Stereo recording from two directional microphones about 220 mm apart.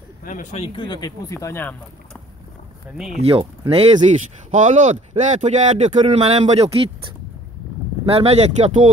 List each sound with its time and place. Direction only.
0.2 s speech: 35° left (ahead or behind); by 1.8 s 10° left (ahead or behind)
3.2 s speech: 25° right (ahead or behind)
8.0 s speech: 25° right (ahead or behind)